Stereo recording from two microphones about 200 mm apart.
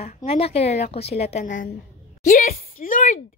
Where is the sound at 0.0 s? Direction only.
30° left (ahead or behind).